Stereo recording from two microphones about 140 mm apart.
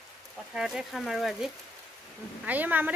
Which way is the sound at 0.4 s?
Centre (ahead or behind).